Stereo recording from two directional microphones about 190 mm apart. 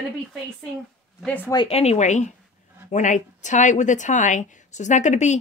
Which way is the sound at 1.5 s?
30° left (ahead or behind).